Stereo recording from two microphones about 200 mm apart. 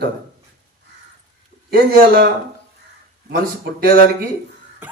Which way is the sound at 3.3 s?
50° right (ahead or behind).